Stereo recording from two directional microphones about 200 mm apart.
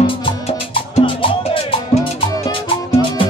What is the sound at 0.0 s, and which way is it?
Music, 30° left (ahead or behind).